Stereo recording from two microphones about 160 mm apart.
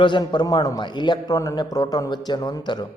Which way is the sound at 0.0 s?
30° left (ahead or behind).